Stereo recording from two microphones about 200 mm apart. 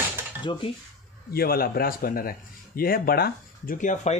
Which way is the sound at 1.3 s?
50° left (ahead or behind).